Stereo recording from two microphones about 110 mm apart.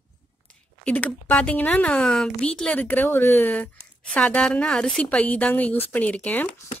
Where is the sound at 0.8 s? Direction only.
15° left (ahead or behind).